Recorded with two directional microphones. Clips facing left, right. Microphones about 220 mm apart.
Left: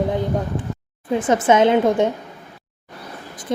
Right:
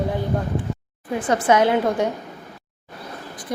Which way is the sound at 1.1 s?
20° left (ahead or behind).